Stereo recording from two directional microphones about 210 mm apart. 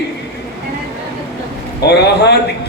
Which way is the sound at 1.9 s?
50° left (ahead or behind).